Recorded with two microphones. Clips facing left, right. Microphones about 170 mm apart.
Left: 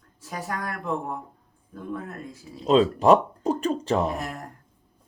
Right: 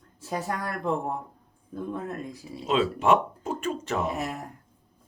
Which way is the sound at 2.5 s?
35° left (ahead or behind).